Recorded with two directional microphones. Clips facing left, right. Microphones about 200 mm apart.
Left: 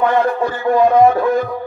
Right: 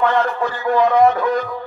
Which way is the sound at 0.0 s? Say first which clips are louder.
Left 3 dB; 10° left (ahead or behind).